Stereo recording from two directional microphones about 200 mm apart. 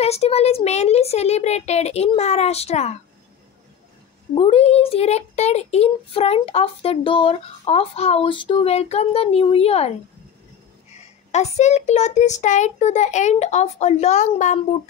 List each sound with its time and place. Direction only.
0.0 s a child's voice: 30° left (ahead or behind)
4.4 s a child's voice: 30° left (ahead or behind)
11.0 s a child's voice: 35° left (ahead or behind)